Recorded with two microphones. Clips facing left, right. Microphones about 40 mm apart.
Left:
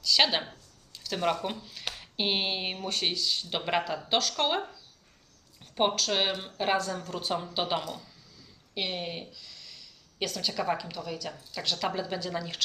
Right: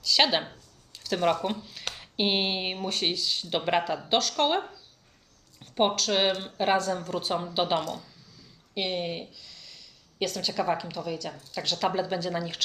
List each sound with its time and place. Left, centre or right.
0.0 s speech: centre